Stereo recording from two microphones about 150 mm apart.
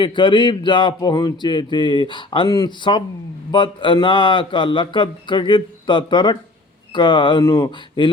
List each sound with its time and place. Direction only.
0.0 s speech: 30° left (ahead or behind)
7.4 s speech: 20° left (ahead or behind)
8.0 s speech: 30° left (ahead or behind)